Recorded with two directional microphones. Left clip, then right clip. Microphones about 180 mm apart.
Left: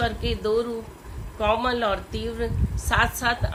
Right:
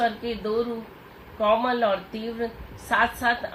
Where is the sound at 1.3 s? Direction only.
25° left (ahead or behind).